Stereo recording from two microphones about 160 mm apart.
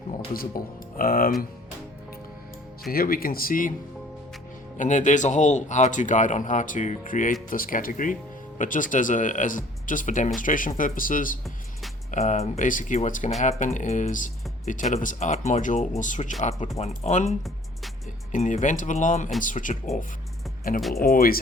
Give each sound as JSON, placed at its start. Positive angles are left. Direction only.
{"t": 0.3, "sound": "speech", "side_deg": 65}
{"t": 2.9, "sound": "speech", "side_deg": 65}
{"t": 4.8, "sound": "speech", "side_deg": 50}
{"t": 12.1, "sound": "speech", "side_deg": 45}
{"t": 20.9, "sound": "speech", "side_deg": 70}